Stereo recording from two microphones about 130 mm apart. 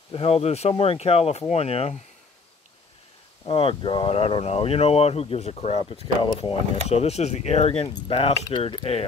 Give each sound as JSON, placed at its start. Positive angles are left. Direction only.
{"t": 0.1, "sound": "speech", "side_deg": 50}
{"t": 3.4, "sound": "speech", "side_deg": 45}
{"t": 6.9, "sound": "speech", "side_deg": 55}
{"t": 8.5, "sound": "a sound", "side_deg": 35}